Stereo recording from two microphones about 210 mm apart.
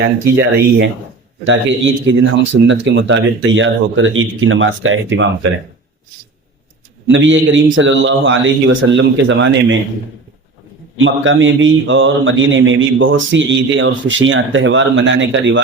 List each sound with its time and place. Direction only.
0.3 s a man's voice: 55° right (ahead or behind)
7.1 s a man's voice: 60° right (ahead or behind)
10.9 s a man's voice: 65° right (ahead or behind)